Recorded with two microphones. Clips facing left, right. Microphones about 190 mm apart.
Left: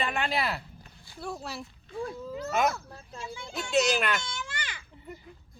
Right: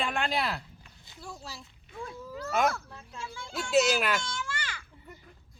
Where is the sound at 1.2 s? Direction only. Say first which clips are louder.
Left 7 dB; 65° left (ahead or behind).